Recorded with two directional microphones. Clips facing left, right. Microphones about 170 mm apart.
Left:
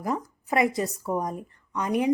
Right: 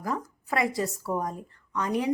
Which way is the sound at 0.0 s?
20° left (ahead or behind).